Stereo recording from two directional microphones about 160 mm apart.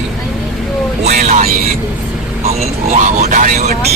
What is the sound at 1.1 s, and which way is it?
Speech, 45° right (ahead or behind).